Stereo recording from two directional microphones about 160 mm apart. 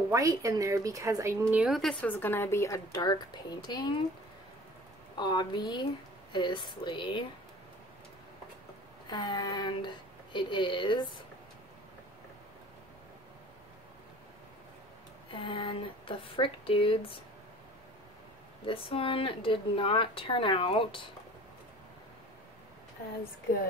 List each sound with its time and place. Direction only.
0.1 s a woman's voice: 20° right (ahead or behind)
1.8 s a woman's voice: 5° left (ahead or behind); by 4.0 s 25° left (ahead or behind)
5.1 s a woman's voice: 30° left (ahead or behind)
9.1 s a woman's voice: 25° left (ahead or behind)
15.3 s speech: 30° left (ahead or behind)
18.7 s speech: 35° left (ahead or behind)